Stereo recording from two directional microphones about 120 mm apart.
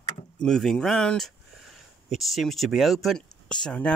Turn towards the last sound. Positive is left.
turn(degrees=10)  # may be behind; listen again after turning